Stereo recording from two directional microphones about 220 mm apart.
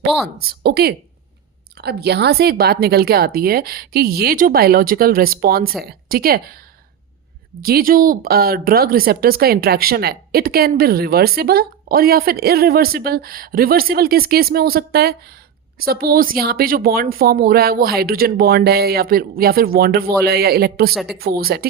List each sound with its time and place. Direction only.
0.4 s speech: 45° right (ahead or behind)
7.6 s speech: 40° right (ahead or behind)
20.9 s speech: centre (ahead or behind)
21.2 s speech: 45° right (ahead or behind)